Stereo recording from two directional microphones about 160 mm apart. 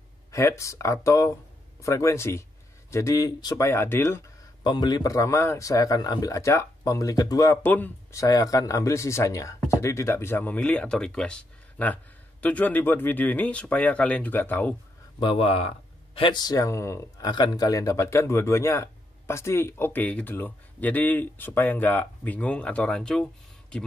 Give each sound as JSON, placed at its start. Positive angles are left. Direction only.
{"t": 0.3, "sound": "a man's voice", "side_deg": 20}
{"t": 4.6, "sound": "a man's voice", "side_deg": 25}
{"t": 15.1, "sound": "speech", "side_deg": 35}